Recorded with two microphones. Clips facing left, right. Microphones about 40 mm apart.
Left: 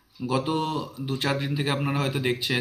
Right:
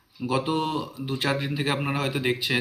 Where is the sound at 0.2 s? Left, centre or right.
Centre.